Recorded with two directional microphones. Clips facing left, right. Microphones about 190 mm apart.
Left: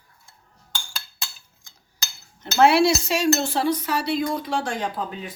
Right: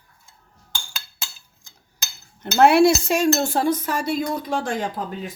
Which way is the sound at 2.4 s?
55° right (ahead or behind).